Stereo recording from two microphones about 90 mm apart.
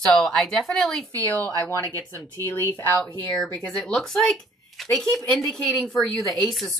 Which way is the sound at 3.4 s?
5° left (ahead or behind).